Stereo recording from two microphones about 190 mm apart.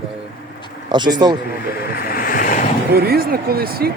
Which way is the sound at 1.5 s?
55° left (ahead or behind).